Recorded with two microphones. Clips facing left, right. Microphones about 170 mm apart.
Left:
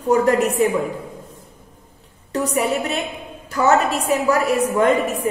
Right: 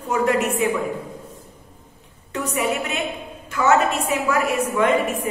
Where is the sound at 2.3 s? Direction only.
35° left (ahead or behind).